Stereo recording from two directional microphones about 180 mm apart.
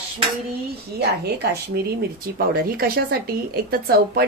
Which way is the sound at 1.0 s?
65° right (ahead or behind).